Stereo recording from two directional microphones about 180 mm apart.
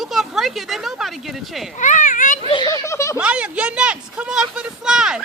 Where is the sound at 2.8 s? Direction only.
15° left (ahead or behind).